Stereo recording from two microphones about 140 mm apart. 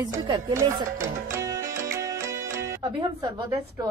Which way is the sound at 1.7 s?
75° right (ahead or behind).